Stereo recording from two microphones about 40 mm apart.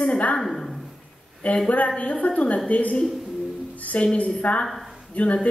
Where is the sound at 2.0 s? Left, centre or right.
Left.